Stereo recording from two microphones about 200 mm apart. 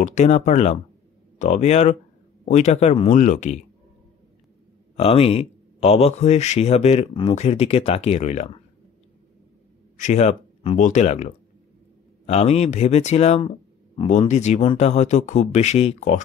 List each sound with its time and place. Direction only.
0.0 s speech: 35° left (ahead or behind)
4.9 s speech: 30° left (ahead or behind)
9.9 s speech: 35° left (ahead or behind)